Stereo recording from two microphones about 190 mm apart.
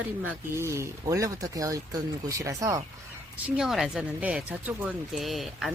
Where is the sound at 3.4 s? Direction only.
5° right (ahead or behind).